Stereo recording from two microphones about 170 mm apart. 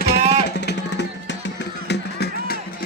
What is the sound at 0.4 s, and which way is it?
Music, 85° left.